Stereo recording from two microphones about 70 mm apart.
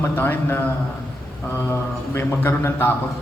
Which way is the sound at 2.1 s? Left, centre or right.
Left.